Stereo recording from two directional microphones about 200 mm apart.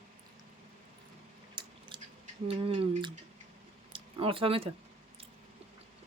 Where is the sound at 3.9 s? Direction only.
25° right (ahead or behind).